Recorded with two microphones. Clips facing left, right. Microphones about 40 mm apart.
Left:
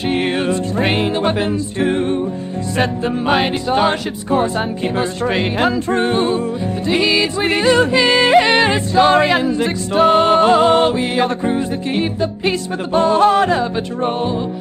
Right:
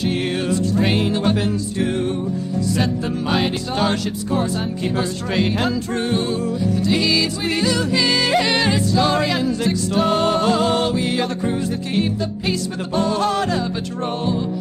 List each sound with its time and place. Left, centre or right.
0.5 s music: left
2.8 s music: left